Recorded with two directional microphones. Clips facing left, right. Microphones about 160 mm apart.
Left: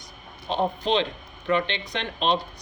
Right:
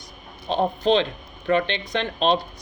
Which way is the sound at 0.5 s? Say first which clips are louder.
Right 4 dB; 40° right (ahead or behind).